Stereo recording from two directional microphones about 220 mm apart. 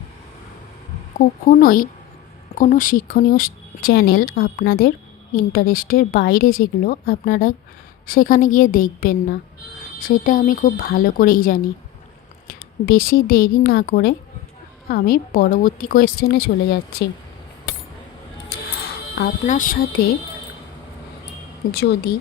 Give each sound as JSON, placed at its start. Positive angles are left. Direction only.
{"t": 1.5, "sound": "speech", "side_deg": 40}
{"t": 19.1, "sound": "speech", "side_deg": 40}
{"t": 21.7, "sound": "speech", "side_deg": 45}